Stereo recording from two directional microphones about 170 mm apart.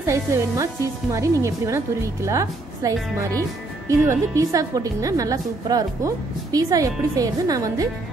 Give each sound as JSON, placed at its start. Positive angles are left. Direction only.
{"t": 0.0, "sound": "a woman's voice", "side_deg": -15}